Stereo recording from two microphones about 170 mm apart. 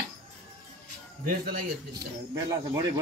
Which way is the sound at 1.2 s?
65° right (ahead or behind).